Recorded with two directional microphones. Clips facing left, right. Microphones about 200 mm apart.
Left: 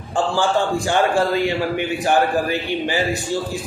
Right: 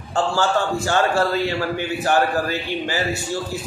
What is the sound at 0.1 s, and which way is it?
A man's voice, 15° left (ahead or behind).